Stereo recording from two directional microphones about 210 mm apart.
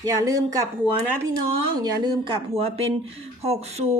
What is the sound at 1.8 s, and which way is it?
Speech, 20° right (ahead or behind).